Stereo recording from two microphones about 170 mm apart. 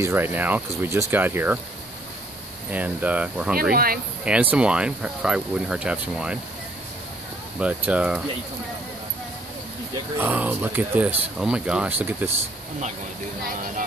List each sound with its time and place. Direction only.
0.0 s speech: 15° right (ahead or behind)
2.7 s speech: 10° right (ahead or behind)
3.7 s speech: 60° right (ahead or behind)
4.2 s speech: 10° right (ahead or behind)
7.6 s speech: 10° right (ahead or behind)
10.1 s speech: 10° right (ahead or behind)